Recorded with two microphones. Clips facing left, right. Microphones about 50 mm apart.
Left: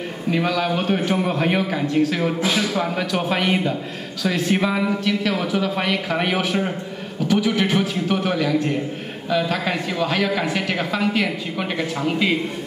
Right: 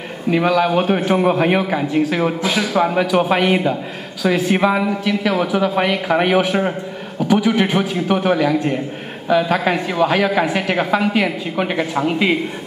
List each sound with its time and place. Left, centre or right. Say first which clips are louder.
0.3 s a man's voice: right 6 dB; centre